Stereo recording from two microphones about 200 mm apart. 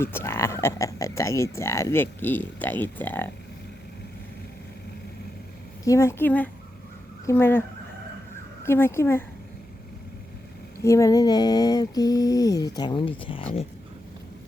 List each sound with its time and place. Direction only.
0.0 s speech: 10° left (ahead or behind)
5.8 s speech: 15° left (ahead or behind)
8.6 s speech: 10° left (ahead or behind)
10.8 s a sound: 15° left (ahead or behind)